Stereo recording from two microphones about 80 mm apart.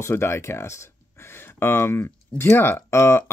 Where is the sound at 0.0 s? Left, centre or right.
Left.